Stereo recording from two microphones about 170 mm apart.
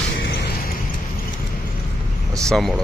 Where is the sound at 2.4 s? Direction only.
Centre (ahead or behind).